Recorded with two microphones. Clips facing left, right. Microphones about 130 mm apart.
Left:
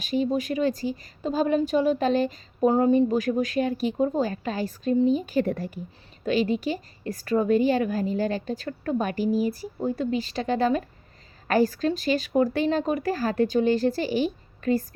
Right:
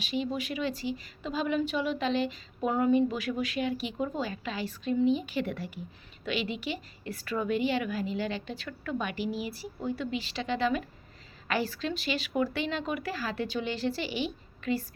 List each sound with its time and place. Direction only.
0.0 s speech: 45° left (ahead or behind)